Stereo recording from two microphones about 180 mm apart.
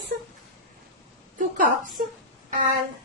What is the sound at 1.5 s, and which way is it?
Speech, 50° right (ahead or behind).